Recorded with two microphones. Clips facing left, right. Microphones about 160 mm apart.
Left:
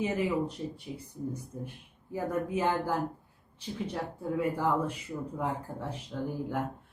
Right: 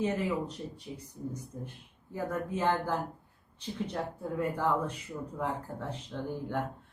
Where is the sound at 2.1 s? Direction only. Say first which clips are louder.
Left 3 dB; 10° left (ahead or behind).